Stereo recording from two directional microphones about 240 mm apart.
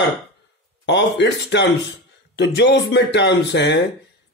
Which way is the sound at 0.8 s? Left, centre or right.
Left.